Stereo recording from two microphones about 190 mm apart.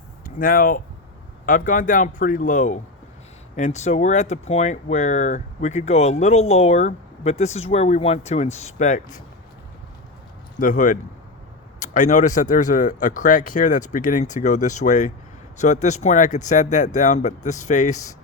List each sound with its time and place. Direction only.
0.3 s a man's voice: 50° left (ahead or behind)
10.6 s a man's voice: 45° left (ahead or behind)